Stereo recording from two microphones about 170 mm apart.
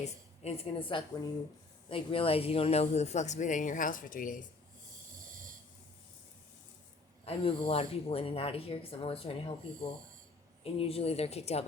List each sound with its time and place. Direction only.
0.0 s a woman's voice: 35° left (ahead or behind)
7.3 s speech: 35° left (ahead or behind)
10.6 s speech: 35° left (ahead or behind)